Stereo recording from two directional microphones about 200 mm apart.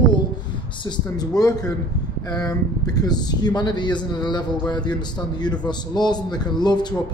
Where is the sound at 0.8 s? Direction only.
20° left (ahead or behind).